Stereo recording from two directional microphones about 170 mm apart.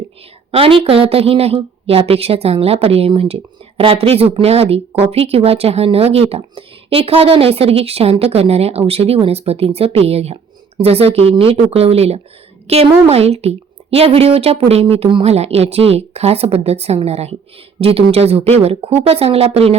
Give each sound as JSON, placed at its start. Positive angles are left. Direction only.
{"t": 0.5, "sound": "a woman's voice", "side_deg": -35}